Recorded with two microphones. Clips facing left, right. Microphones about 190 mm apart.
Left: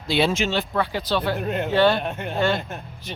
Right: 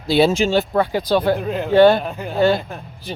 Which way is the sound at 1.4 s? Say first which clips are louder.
Right 2 dB; centre (ahead or behind).